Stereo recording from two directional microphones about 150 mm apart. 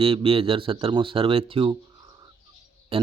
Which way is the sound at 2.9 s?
40° right (ahead or behind).